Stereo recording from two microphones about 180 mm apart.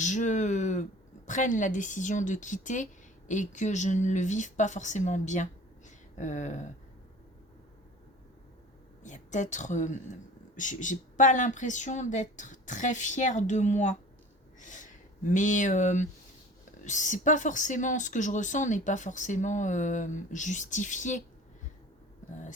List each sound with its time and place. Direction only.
0.0 s speech: 40° left (ahead or behind)
9.0 s speech: 45° left (ahead or behind)